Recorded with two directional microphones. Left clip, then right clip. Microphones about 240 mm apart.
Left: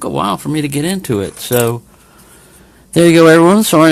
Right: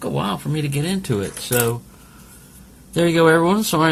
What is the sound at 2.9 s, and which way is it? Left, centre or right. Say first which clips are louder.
Speech: left 8 dB; left.